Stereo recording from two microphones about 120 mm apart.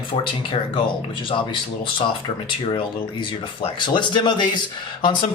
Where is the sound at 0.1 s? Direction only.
45° left (ahead or behind).